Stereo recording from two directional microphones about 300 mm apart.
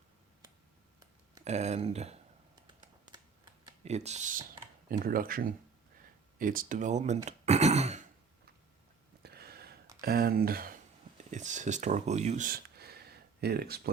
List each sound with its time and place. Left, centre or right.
0.9 s a sound: centre
3.1 s computer keyboard: centre
4.9 s speech: right
7.3 s throat clearing: right
9.2 s a sound: right
10.0 s speech: right